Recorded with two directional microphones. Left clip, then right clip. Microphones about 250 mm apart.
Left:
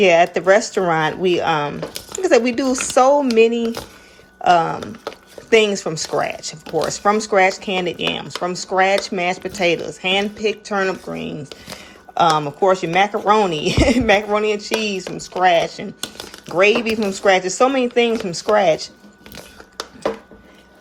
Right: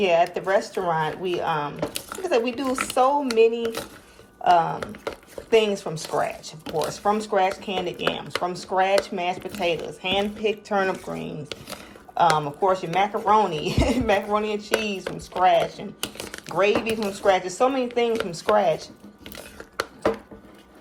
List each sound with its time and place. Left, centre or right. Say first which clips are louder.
0.0 s speech: left 7 dB; left